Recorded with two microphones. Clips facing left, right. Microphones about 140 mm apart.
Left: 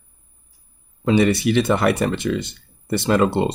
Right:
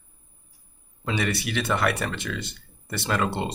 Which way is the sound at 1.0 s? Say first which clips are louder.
Left 11 dB; 25° left (ahead or behind).